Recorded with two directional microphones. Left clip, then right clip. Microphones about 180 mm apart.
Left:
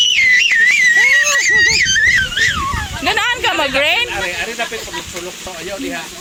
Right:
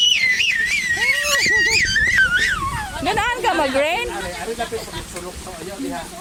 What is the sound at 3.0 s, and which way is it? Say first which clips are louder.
Speech: left 4 dB; 5° right (ahead or behind).